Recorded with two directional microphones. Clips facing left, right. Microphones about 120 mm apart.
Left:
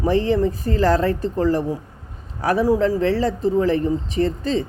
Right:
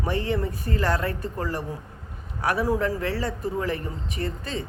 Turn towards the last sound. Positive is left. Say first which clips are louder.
# left 10 dB
turn(degrees=30)  # may be behind; listen again after turning